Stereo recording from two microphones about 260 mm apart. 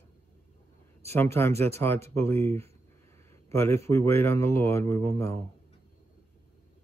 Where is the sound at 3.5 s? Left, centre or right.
Centre.